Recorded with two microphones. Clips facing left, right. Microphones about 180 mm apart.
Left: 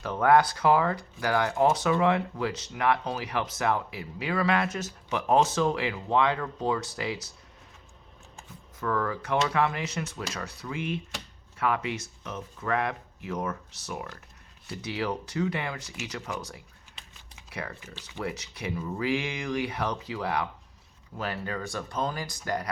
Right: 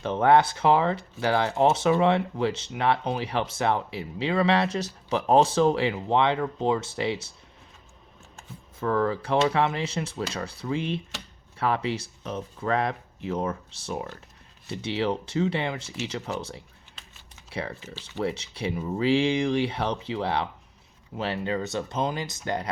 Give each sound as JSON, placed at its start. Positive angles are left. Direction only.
{"t": 0.0, "sound": "speech", "side_deg": -25}
{"t": 8.8, "sound": "speech", "side_deg": -30}